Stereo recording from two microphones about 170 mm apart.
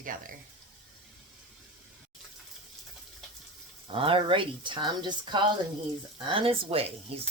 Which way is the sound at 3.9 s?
30° right (ahead or behind).